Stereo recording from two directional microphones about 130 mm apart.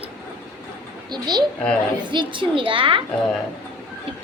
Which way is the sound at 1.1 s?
35° right (ahead or behind).